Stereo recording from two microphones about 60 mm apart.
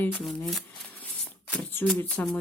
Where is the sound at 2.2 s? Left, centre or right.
Left.